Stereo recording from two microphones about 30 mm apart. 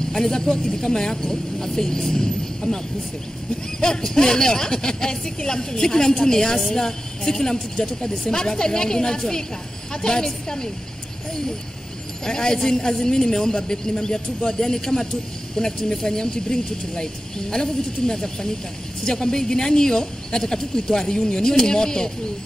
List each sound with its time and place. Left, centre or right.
0.2 s speech: left
3.8 s speech: centre
12.3 s speech: left